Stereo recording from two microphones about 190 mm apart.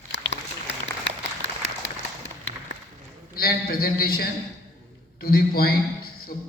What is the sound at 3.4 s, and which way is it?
A man's voice, 55° left (ahead or behind).